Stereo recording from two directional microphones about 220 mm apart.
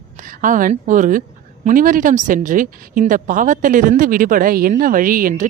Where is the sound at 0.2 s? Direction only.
35° right (ahead or behind).